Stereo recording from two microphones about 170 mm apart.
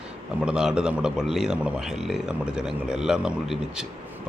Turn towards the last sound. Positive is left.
turn(degrees=-5)  # may be behind; listen again after turning